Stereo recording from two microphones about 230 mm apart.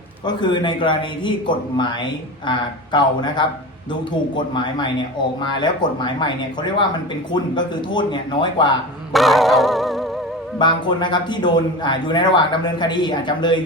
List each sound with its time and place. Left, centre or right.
0.3 s a man's voice: centre
9.1 s dog: centre
10.6 s a man's voice: left